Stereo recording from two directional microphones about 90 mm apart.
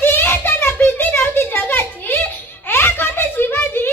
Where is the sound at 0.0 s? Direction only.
25° left (ahead or behind).